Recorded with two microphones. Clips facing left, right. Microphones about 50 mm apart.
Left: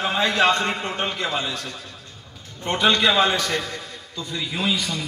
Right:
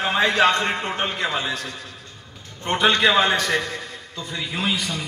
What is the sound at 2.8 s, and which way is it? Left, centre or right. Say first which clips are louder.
Speech: right 1 dB; centre.